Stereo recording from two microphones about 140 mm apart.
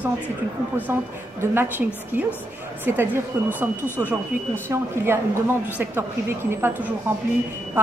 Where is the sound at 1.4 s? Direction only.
15° right (ahead or behind).